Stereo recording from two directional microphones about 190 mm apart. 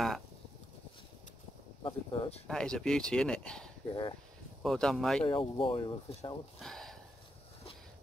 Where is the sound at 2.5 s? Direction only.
5° left (ahead or behind).